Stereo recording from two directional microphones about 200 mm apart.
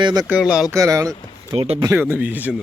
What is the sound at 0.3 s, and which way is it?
Speech, 5° right (ahead or behind).